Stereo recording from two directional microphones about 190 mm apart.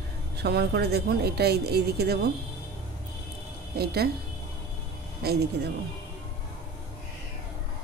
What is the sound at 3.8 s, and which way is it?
Speech, 55° right (ahead or behind).